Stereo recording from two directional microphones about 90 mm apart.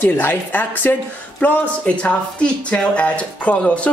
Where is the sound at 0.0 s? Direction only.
25° left (ahead or behind).